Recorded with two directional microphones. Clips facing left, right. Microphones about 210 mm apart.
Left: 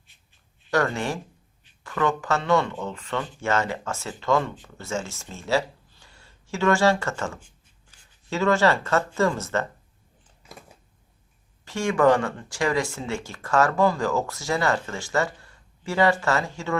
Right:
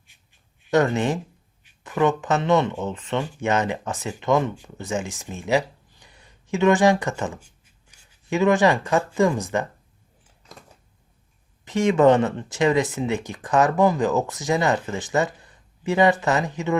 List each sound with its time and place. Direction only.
0.7 s speech: 20° right (ahead or behind)
11.6 s speech: 20° right (ahead or behind)